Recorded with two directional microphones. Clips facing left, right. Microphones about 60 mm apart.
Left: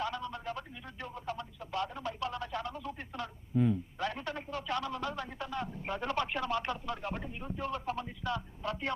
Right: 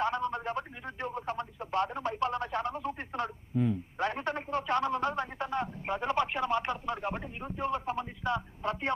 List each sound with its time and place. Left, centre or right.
0.0 s radio: right
3.5 s speech: centre
3.9 s a sound: right
5.8 s radio: right